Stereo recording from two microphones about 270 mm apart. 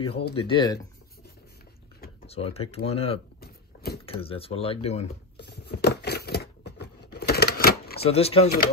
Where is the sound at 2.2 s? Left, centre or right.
Left.